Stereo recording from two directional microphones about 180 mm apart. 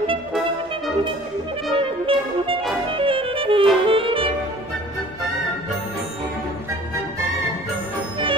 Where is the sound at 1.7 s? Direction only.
30° right (ahead or behind).